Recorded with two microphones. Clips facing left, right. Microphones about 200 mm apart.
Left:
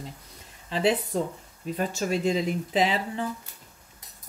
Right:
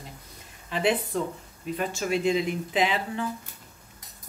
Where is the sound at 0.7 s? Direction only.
35° left (ahead or behind).